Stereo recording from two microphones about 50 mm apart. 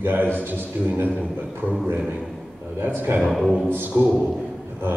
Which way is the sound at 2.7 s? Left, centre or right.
Right.